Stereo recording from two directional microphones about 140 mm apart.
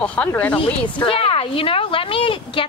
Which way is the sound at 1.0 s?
40° left (ahead or behind).